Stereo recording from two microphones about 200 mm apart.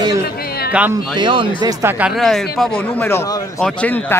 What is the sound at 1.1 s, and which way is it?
A man's voice, 25° right (ahead or behind).